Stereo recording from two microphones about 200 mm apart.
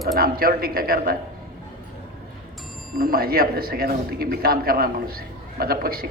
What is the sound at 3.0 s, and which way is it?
A man's voice, 45° right (ahead or behind).